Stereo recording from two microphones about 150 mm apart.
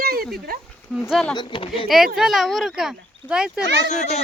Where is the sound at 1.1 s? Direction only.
5° left (ahead or behind).